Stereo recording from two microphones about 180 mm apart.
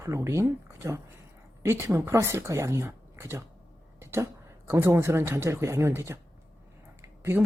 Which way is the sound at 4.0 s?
15° right (ahead or behind).